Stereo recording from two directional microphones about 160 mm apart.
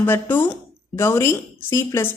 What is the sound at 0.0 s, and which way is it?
A woman's voice, 10° left (ahead or behind).